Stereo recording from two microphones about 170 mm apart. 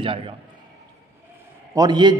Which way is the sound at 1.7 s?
25° right (ahead or behind).